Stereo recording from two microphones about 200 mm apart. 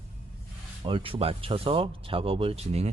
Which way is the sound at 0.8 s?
25° right (ahead or behind).